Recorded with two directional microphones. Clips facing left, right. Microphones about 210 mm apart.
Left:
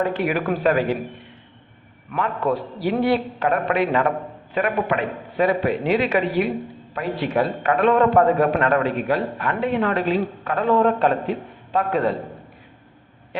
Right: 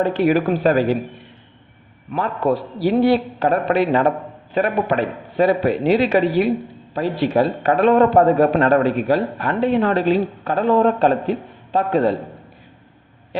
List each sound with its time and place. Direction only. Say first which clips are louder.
0.0 s a man's voice: right 5 dB; 30° right (ahead or behind)
2.8 s a man's voice: right 5 dB; 35° right (ahead or behind)